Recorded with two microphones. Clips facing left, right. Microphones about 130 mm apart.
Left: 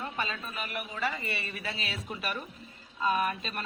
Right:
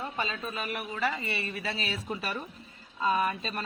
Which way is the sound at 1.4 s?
30° right (ahead or behind).